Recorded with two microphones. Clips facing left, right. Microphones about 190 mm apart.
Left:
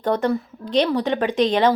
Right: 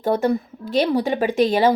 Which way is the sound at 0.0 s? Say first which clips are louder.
Right 1 dB; 10° right (ahead or behind).